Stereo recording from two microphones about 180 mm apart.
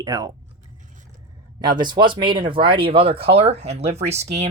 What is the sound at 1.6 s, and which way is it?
Speech, 25° right (ahead or behind).